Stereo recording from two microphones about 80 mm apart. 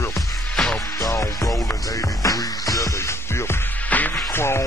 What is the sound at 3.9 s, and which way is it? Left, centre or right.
Music, left.